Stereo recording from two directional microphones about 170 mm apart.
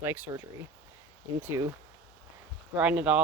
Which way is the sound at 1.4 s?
15° right (ahead or behind).